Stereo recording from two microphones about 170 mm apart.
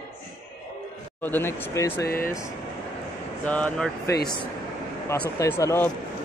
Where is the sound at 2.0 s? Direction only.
60° left (ahead or behind).